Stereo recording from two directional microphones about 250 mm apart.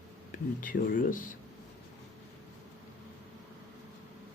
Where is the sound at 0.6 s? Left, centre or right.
Left.